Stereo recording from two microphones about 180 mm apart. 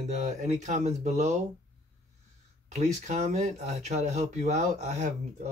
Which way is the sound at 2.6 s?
40° right (ahead or behind).